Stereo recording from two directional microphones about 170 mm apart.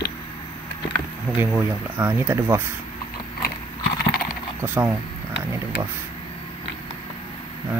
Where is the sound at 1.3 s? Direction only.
10° right (ahead or behind).